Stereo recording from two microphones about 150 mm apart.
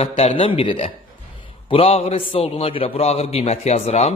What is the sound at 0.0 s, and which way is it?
A man's voice, 40° left (ahead or behind).